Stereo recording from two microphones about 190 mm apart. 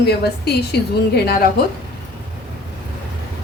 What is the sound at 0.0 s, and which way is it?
A woman's voice, 55° left (ahead or behind).